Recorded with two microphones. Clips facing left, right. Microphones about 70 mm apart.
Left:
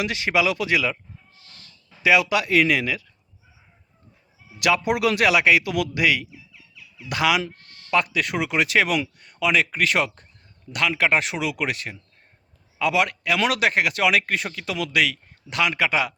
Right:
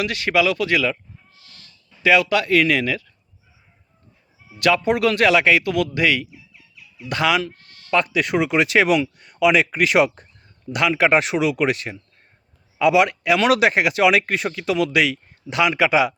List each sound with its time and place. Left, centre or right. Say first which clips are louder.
0.0 s a man's voice: right 3 dB; centre
2.0 s a man's voice: right 2 dB; centre
4.6 s a man's voice: right 3 dB; centre